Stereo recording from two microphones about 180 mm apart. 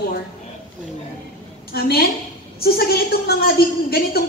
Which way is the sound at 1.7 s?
60° left (ahead or behind).